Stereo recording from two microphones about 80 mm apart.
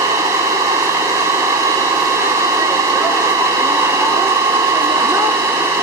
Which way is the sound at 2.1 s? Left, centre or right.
Right.